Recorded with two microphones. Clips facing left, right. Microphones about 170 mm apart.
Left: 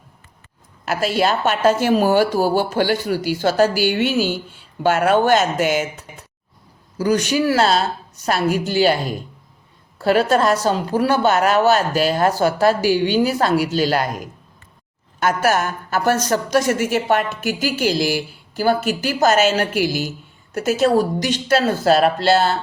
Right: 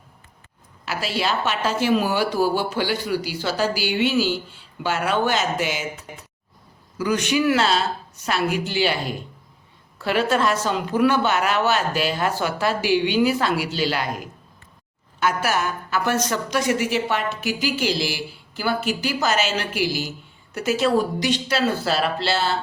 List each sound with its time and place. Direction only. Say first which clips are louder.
0.9 s a woman's voice: left 6 dB; 50° left (ahead or behind)
7.0 s speech: left 3 dB; 40° left (ahead or behind)
15.2 s a woman's voice: left 4 dB; 45° left (ahead or behind)